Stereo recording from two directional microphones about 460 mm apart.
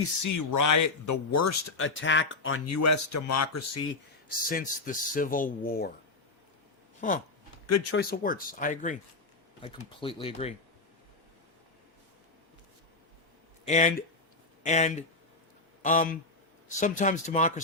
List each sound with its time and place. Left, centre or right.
0.2 s speech: left
4.3 s speech: centre
7.0 s speech: centre
7.7 s speech: left; by 10.5 s centre
13.7 s speech: centre